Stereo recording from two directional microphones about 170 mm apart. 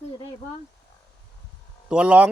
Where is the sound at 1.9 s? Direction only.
5° right (ahead or behind).